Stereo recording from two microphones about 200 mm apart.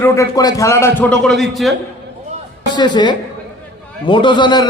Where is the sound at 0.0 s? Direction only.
15° left (ahead or behind).